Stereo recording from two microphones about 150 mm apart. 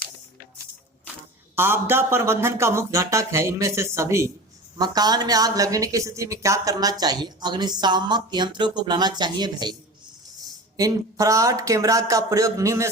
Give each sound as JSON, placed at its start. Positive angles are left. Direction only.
{"t": 1.5, "sound": "a woman's voice", "side_deg": -15}
{"t": 10.8, "sound": "a woman's voice", "side_deg": -25}